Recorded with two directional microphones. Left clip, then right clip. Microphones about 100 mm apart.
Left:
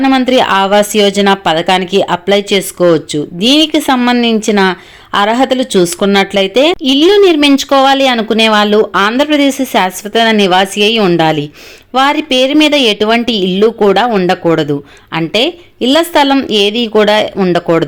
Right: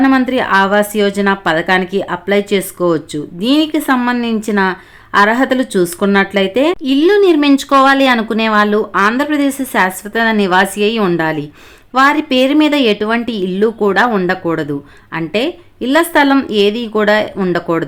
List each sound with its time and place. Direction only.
0.0 s speech: 20° left (ahead or behind)
11.2 s speech: 30° left (ahead or behind)